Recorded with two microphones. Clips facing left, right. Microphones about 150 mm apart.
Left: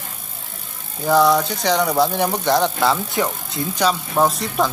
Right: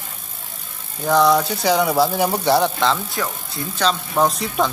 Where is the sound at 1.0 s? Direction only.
Centre (ahead or behind).